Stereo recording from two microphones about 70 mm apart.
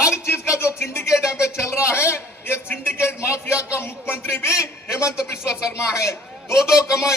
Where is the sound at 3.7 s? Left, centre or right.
Left.